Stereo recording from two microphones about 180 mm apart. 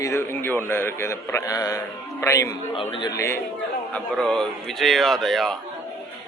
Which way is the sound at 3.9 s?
5° left (ahead or behind).